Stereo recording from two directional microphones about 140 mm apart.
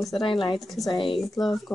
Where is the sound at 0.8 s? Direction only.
35° left (ahead or behind).